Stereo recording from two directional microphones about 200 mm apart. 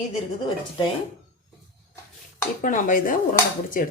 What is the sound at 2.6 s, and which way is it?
Speech, 40° left (ahead or behind).